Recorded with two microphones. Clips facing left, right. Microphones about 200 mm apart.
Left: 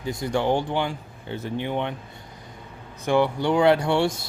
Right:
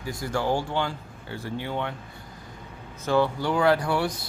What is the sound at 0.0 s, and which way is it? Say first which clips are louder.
Speech: left 4 dB; 20° left (ahead or behind).